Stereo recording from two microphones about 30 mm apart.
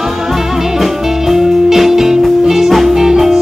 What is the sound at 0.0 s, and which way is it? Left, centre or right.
Music, centre.